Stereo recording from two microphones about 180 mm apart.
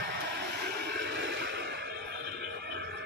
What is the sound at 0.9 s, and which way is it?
Music, 70° right (ahead or behind).